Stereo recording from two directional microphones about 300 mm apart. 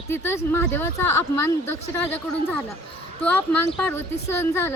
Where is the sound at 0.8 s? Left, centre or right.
Left.